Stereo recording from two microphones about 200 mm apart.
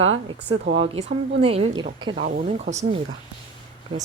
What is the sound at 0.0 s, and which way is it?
Speech, 30° right (ahead or behind).